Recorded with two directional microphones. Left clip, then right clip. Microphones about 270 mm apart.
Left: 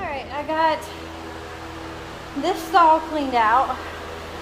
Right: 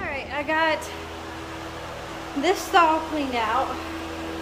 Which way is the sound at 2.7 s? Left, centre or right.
Centre.